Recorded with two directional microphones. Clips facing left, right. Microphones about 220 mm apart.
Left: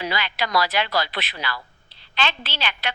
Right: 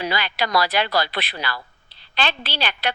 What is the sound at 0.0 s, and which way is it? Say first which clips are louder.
A woman's voice: right 2 dB; 35° right (ahead or behind).